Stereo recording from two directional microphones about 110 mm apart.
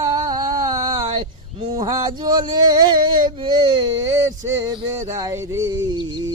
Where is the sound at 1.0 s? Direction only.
55° right (ahead or behind); by 5.7 s 30° right (ahead or behind).